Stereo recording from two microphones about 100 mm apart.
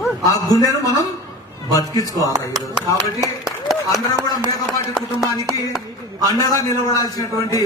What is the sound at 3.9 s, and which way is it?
Speech, 45° left (ahead or behind).